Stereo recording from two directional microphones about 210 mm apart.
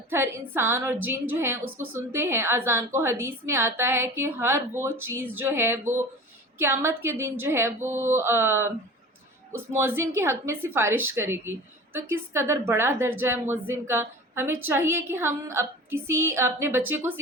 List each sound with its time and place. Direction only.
0.1 s a woman's voice: 10° right (ahead or behind)